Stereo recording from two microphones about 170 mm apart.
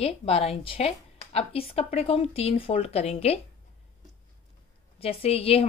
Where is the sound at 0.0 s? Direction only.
35° left (ahead or behind).